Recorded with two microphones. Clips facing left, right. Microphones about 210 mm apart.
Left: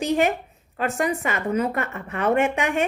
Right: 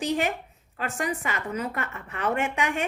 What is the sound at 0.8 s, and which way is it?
A woman's voice, 25° left (ahead or behind).